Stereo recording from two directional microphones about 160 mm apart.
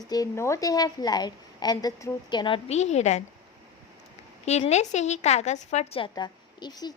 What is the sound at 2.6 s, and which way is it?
Speech, 45° left (ahead or behind).